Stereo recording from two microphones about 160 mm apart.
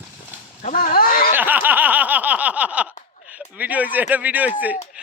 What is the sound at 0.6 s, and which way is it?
Speech, 55° left (ahead or behind).